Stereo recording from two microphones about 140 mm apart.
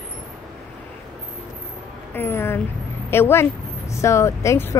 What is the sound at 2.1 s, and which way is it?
Vehicle, 15° left (ahead or behind).